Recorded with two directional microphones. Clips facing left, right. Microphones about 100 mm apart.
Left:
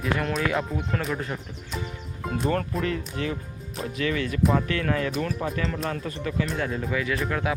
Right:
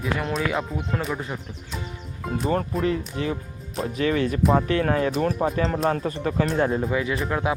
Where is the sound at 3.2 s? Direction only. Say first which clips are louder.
Right 2 dB; 25° right (ahead or behind).